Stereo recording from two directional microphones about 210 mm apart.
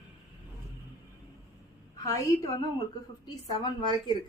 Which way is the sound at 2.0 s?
15° left (ahead or behind).